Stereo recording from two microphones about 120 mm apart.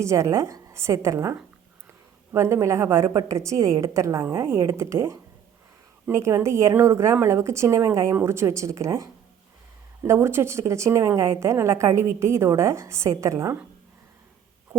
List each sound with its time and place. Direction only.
0.0 s a woman's voice: 25° right (ahead or behind)